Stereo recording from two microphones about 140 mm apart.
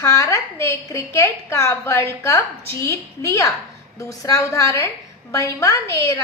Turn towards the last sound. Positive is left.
turn(degrees=20)  # may be behind; listen again after turning